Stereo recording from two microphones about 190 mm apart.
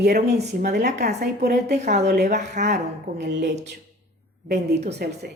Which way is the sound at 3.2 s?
60° right (ahead or behind).